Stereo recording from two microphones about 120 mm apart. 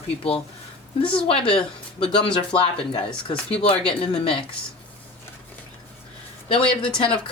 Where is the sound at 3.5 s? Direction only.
50° left (ahead or behind).